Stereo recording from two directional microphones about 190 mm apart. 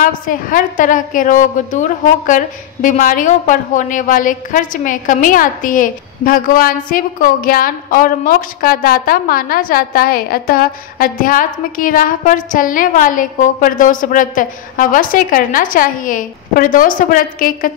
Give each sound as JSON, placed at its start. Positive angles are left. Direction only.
{"t": 0.0, "sound": "a woman's voice", "side_deg": 45}